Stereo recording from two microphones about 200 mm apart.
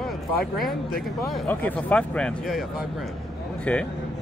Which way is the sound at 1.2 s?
Centre (ahead or behind).